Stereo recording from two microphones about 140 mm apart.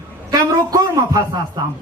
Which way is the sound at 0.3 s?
25° right (ahead or behind).